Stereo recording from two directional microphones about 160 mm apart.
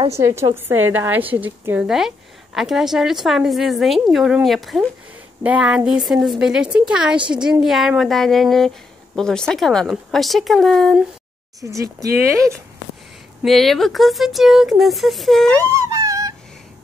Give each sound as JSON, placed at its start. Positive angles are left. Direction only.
{"t": 0.1, "sound": "a woman's voice", "side_deg": -15}
{"t": 11.6, "sound": "speech", "side_deg": -20}
{"t": 13.4, "sound": "a woman's voice", "side_deg": 0}
{"t": 15.6, "sound": "wail", "side_deg": -20}